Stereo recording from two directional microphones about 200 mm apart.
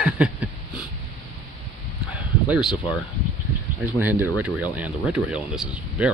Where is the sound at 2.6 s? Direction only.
20° left (ahead or behind).